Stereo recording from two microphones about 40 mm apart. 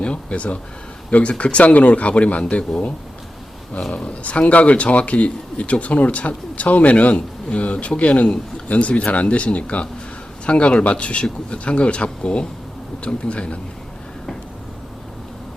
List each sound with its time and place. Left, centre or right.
0.0 s speech: left
3.9 s speech: left